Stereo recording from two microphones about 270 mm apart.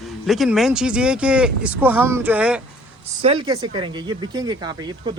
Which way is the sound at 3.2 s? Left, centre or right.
Centre.